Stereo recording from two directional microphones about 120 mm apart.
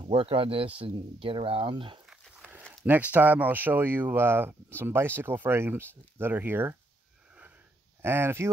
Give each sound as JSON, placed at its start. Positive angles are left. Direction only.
{"t": 0.0, "sound": "speech", "side_deg": -50}
{"t": 2.0, "sound": "a sound", "side_deg": -10}
{"t": 2.8, "sound": "speech", "side_deg": -15}
{"t": 8.0, "sound": "speech", "side_deg": -20}